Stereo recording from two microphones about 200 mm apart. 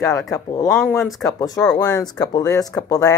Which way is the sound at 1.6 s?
5° left (ahead or behind).